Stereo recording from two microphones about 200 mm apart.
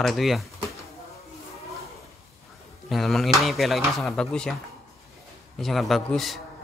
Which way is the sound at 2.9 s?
Centre (ahead or behind).